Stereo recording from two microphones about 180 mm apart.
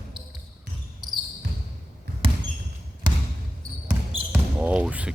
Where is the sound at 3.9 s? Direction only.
10° right (ahead or behind).